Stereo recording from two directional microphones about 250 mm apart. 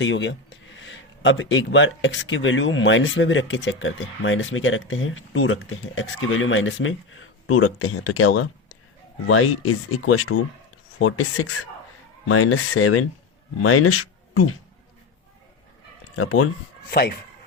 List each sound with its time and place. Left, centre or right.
0.0 s speech: left
16.1 s speech: left
16.9 s speech: left